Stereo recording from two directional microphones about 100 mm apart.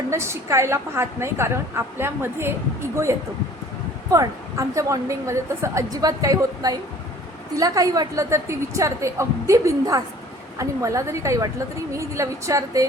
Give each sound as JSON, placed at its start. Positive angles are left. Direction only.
{"t": 0.1, "sound": "a woman's voice", "side_deg": -30}
{"t": 4.1, "sound": "a woman's voice", "side_deg": -30}